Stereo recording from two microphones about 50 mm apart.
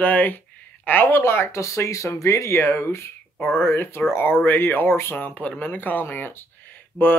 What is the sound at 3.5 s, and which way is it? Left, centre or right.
Speech, left.